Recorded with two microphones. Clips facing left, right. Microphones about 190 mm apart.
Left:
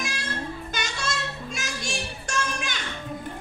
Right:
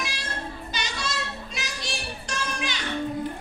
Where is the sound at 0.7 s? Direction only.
50° left (ahead or behind).